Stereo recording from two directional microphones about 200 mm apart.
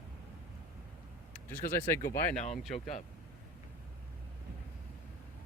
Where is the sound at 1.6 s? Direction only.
45° left (ahead or behind).